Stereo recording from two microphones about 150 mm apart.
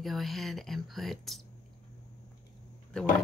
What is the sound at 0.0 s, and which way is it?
Speech, centre (ahead or behind).